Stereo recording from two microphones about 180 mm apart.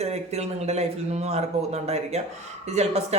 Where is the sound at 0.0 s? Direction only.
35° right (ahead or behind).